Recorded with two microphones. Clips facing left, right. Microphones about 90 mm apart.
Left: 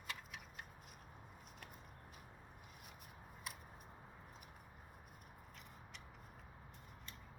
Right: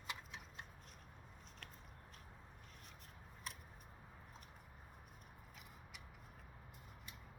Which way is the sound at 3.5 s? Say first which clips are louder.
Left 1 dB; 5° left (ahead or behind).